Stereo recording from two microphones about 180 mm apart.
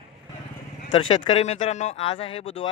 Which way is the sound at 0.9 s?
30° left (ahead or behind).